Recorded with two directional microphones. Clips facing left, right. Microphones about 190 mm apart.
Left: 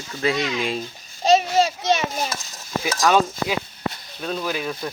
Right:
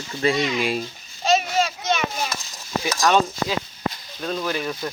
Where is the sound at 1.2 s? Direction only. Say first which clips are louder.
Left 3 dB; 40° left (ahead or behind).